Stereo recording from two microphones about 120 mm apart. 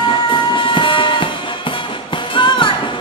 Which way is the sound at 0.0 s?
40° left (ahead or behind).